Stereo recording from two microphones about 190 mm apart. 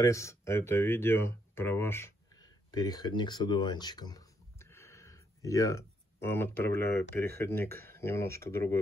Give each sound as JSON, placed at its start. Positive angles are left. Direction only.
{"t": 0.0, "sound": "speech", "side_deg": 15}
{"t": 2.7, "sound": "a sound", "side_deg": 20}
{"t": 6.2, "sound": "speech", "side_deg": 10}